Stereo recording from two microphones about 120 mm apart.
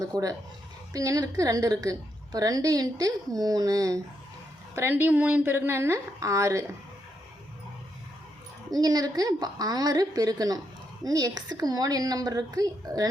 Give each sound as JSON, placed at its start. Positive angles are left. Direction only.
{"t": 0.0, "sound": "a woman's voice", "side_deg": -30}
{"t": 8.7, "sound": "a woman's voice", "side_deg": -30}